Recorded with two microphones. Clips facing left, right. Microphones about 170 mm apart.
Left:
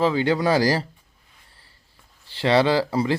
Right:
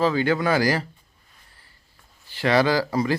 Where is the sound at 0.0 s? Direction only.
25° left (ahead or behind).